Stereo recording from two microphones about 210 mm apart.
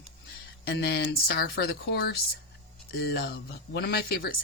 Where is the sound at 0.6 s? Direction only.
50° left (ahead or behind).